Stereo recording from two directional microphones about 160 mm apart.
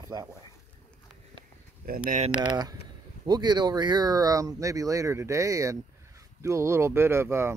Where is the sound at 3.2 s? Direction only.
25° right (ahead or behind).